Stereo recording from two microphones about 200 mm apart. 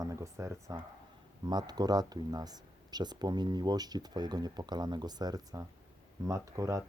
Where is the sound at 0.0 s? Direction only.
15° right (ahead or behind).